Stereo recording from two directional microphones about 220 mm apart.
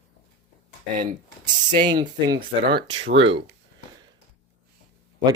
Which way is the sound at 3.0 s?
55° right (ahead or behind).